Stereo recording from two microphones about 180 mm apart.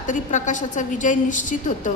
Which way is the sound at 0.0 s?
45° left (ahead or behind).